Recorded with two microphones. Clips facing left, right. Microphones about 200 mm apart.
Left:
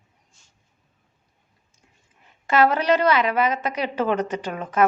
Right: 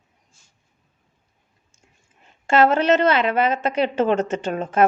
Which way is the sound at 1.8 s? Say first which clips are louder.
Right 2 dB; 25° right (ahead or behind).